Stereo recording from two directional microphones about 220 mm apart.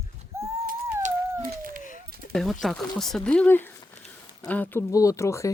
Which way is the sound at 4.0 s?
30° left (ahead or behind).